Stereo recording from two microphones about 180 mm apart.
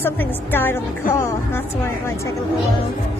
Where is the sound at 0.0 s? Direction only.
10° left (ahead or behind).